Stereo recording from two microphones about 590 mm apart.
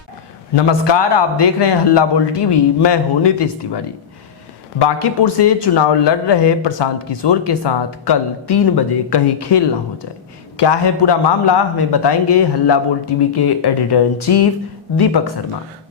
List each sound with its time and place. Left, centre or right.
0.5 s speech: left
4.8 s a man's voice: left